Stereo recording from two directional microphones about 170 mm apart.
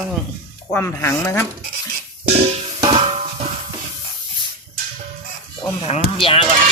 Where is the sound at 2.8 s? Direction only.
35° right (ahead or behind).